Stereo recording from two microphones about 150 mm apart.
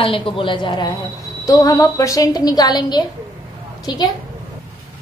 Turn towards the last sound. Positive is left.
turn(degrees=25)  # may be behind; listen again after turning